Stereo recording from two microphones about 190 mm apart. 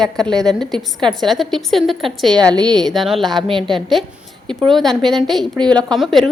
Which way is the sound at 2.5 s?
20° right (ahead or behind).